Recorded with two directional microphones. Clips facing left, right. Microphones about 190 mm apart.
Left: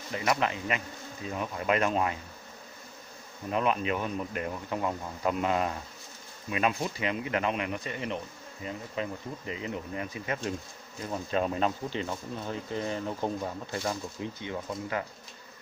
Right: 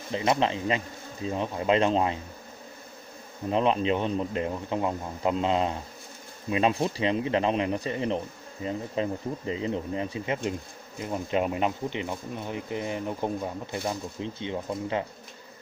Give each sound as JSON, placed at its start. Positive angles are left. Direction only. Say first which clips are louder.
{"t": 0.1, "sound": "a man's voice", "louder": "right 4 dB", "side_deg": -25}
{"t": 3.4, "sound": "a man's voice", "louder": "right 4 dB", "side_deg": -25}